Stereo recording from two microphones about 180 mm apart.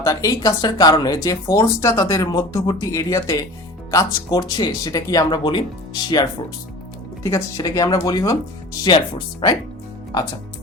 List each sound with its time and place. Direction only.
0.0 s speech: 20° left (ahead or behind)